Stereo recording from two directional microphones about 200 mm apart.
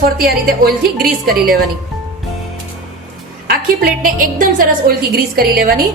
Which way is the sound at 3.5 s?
45° right (ahead or behind).